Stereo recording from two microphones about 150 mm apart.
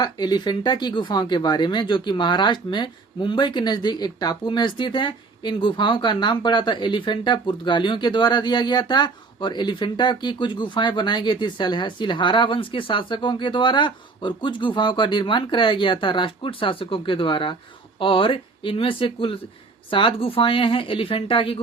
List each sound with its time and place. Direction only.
0.0 s speech: 30° left (ahead or behind)